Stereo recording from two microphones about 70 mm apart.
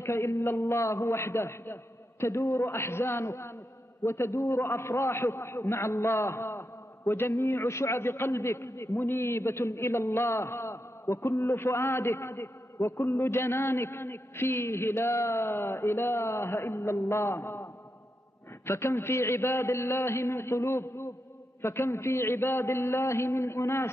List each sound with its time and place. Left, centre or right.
0.0 s a man's voice: left
18.7 s a man's voice: left